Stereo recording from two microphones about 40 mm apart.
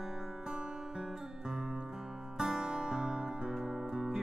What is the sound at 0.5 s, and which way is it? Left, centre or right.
Guitar, centre.